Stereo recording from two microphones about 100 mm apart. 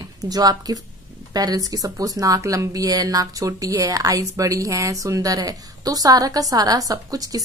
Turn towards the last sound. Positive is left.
turn(degrees=-35)  # may be behind; listen again after turning